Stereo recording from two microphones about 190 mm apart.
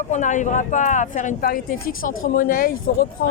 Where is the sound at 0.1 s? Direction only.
40° left (ahead or behind).